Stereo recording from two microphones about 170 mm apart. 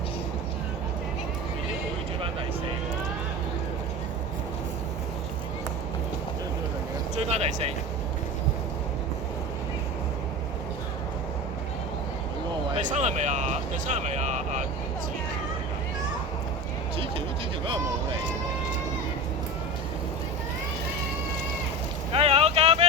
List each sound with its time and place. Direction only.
7.2 s speech: 40° right (ahead or behind)
12.7 s speech: 45° right (ahead or behind)
22.1 s vehicle: 35° right (ahead or behind)